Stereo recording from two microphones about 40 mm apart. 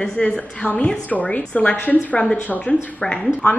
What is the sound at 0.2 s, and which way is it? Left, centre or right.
Speech, left.